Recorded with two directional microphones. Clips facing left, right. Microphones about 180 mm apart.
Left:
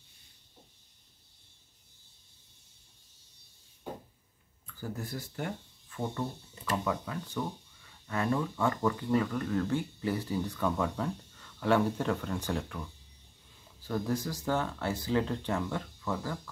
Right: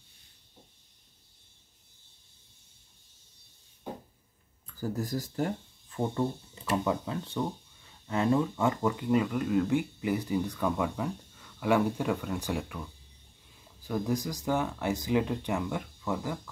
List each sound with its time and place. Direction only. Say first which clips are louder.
4.7 s speech: right 6 dB; 40° right (ahead or behind)
5.9 s speech: right 5 dB; 25° right (ahead or behind)
13.8 s speech: right 2 dB; 10° right (ahead or behind)